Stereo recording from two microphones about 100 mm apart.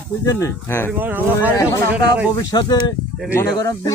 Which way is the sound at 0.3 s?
30° left (ahead or behind).